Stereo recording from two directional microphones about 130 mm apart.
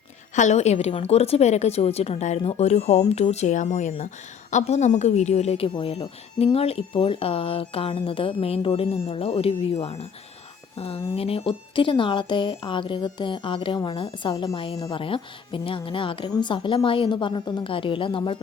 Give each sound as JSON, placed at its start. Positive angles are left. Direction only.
{"t": 0.3, "sound": "a woman's voice", "side_deg": 65}